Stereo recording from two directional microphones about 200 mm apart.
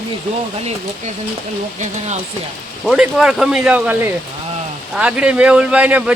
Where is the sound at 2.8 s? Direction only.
5° right (ahead or behind).